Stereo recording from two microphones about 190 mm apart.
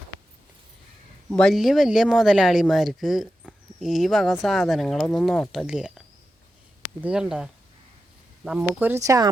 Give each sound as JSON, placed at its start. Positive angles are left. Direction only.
{"t": 1.3, "sound": "speech", "side_deg": 5}
{"t": 7.0, "sound": "speech", "side_deg": -5}